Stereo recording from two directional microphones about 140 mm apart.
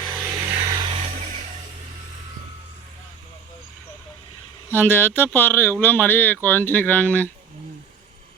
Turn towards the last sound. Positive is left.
turn(degrees=10)  # may be behind; listen again after turning